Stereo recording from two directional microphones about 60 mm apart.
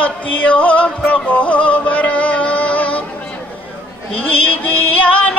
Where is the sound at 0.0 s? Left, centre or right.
Left.